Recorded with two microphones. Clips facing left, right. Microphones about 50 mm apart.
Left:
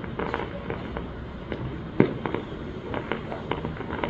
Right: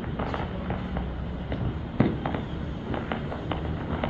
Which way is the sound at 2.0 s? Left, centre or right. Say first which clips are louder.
Left 3 dB; left.